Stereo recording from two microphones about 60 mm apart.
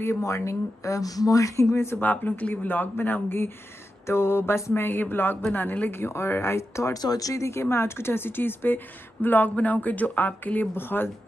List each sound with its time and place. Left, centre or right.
0.0 s speech: left
2.0 s a woman's voice: left
4.1 s a sound: left
4.8 s a woman's voice: left
6.9 s speech: left
7.6 s a woman's voice: left